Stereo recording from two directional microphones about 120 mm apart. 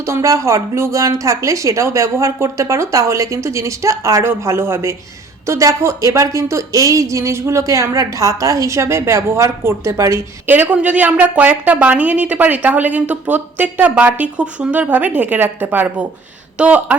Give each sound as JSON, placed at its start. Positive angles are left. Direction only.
{"t": 0.0, "sound": "a woman's voice", "side_deg": -25}